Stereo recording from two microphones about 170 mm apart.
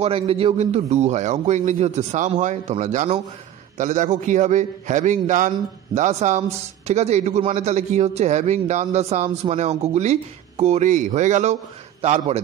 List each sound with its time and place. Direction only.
0.0 s a man's voice: 35° right (ahead or behind)